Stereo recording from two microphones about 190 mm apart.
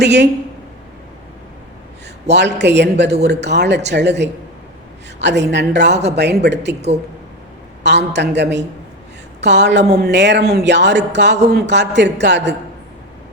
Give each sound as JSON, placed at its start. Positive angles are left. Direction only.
{"t": 0.0, "sound": "speech", "side_deg": -65}
{"t": 2.3, "sound": "speech", "side_deg": -65}
{"t": 7.9, "sound": "speech", "side_deg": -65}